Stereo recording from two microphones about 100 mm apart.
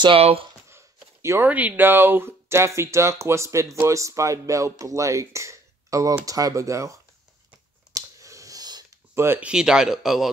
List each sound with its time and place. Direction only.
0.0 s speech: 70° right (ahead or behind)
1.2 s speech: 25° right (ahead or behind)
1.5 s speech: 15° right (ahead or behind); by 7.0 s 30° right (ahead or behind)
7.9 s a sound: 35° right (ahead or behind)
9.1 s speech: 25° right (ahead or behind)
9.4 s speech: 10° right (ahead or behind)